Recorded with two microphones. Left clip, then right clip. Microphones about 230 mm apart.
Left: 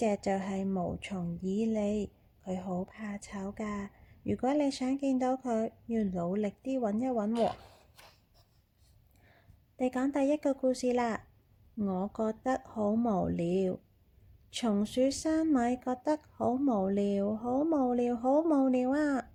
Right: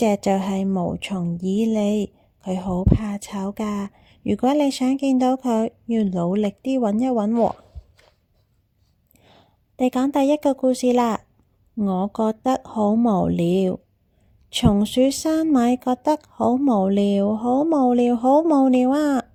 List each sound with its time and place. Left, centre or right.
0.0 s speech: right
9.1 s a woman's voice: right